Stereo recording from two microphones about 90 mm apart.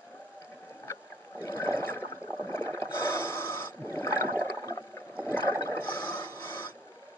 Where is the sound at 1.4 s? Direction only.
25° left (ahead or behind).